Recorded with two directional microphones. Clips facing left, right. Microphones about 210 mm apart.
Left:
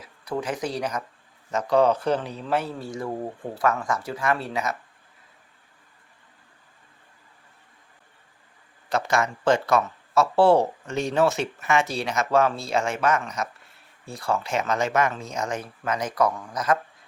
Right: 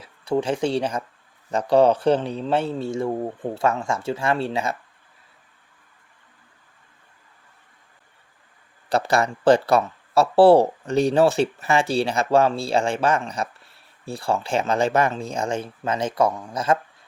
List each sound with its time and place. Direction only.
0.0 s a man's voice: 30° right (ahead or behind)
8.9 s a man's voice: 35° right (ahead or behind)